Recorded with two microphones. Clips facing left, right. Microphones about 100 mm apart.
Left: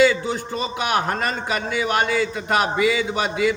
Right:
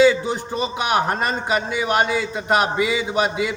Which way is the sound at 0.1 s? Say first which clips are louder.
Right 2 dB; 15° right (ahead or behind).